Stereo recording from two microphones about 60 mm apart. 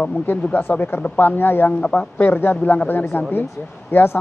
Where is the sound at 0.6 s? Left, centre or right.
Left.